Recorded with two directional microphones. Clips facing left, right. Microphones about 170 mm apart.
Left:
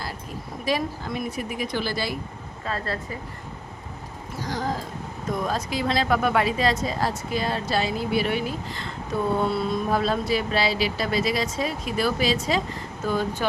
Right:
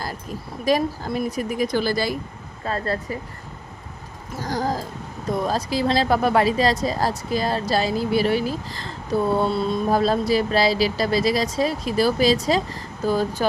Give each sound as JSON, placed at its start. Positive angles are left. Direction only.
{"t": 0.6, "sound": "speech", "side_deg": -40}
{"t": 2.6, "sound": "speech", "side_deg": -25}
{"t": 4.4, "sound": "a sound", "side_deg": -45}
{"t": 5.4, "sound": "speech", "side_deg": -35}